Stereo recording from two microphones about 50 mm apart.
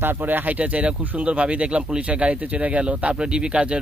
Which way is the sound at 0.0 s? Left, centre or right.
Right.